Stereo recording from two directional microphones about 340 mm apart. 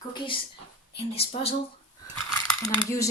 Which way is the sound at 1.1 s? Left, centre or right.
Centre.